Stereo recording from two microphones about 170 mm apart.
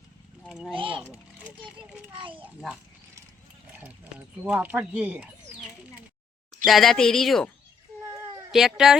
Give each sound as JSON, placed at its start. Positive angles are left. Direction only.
{"t": 0.4, "sound": "speech", "side_deg": 0}
{"t": 0.8, "sound": "a child's voice", "side_deg": -30}
{"t": 1.6, "sound": "speech", "side_deg": -10}
{"t": 3.7, "sound": "horse", "side_deg": -5}
{"t": 4.4, "sound": "speech", "side_deg": -10}
{"t": 6.7, "sound": "speech", "side_deg": 0}
{"t": 8.5, "sound": "speech", "side_deg": 0}